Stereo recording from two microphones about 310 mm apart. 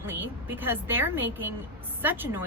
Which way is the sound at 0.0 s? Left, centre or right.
Centre.